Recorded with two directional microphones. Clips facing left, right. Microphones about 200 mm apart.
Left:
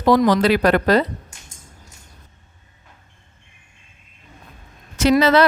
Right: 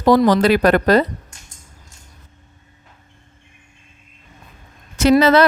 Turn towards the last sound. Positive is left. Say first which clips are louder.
# right 2 dB
turn(degrees=-50)  # may be behind; listen again after turning